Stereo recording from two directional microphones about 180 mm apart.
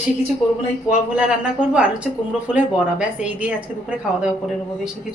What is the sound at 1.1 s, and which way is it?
A woman's voice, 5° right (ahead or behind).